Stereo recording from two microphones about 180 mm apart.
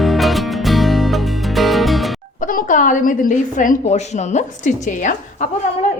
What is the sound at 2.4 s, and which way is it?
A woman's voice, 50° left (ahead or behind).